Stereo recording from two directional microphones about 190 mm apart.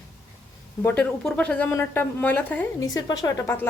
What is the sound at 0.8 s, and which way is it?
A woman's voice, 10° left (ahead or behind).